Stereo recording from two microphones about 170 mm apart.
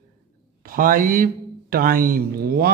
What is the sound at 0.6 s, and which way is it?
A man's voice, 60° right (ahead or behind).